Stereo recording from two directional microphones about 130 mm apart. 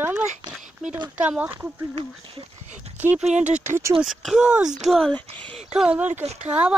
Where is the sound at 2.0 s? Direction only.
45° right (ahead or behind).